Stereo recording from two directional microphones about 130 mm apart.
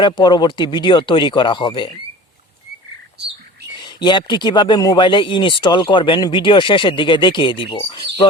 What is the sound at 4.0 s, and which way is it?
Speech, 35° left (ahead or behind).